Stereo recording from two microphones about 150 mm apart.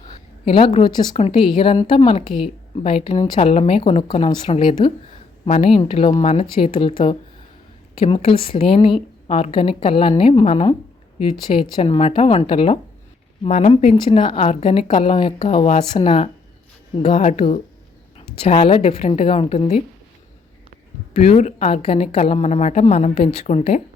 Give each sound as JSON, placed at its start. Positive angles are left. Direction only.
{"t": 0.4, "sound": "a woman's voice", "side_deg": 35}
{"t": 4.6, "sound": "a woman's voice", "side_deg": 30}
{"t": 5.5, "sound": "a woman's voice", "side_deg": 45}
{"t": 8.0, "sound": "a woman's voice", "side_deg": 40}
{"t": 11.8, "sound": "a woman's voice", "side_deg": 40}
{"t": 13.5, "sound": "a woman's voice", "side_deg": 50}
{"t": 17.1, "sound": "a woman's voice", "side_deg": 50}
{"t": 18.4, "sound": "a woman's voice", "side_deg": 40}
{"t": 21.2, "sound": "a woman's voice", "side_deg": 45}